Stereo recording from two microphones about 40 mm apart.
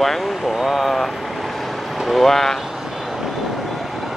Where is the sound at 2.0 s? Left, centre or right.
Centre.